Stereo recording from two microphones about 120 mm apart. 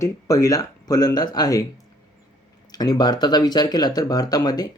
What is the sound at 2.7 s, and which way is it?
Speech, 35° left (ahead or behind).